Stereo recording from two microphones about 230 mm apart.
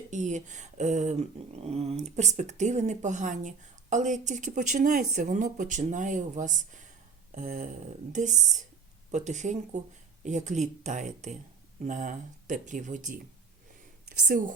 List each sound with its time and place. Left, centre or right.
0.1 s speech: right
14.3 s speech: right